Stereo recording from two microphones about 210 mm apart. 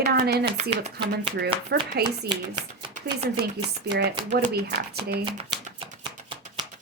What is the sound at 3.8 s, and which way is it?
A woman's voice, 55° right (ahead or behind).